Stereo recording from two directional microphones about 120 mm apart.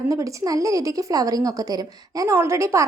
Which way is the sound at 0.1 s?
30° right (ahead or behind).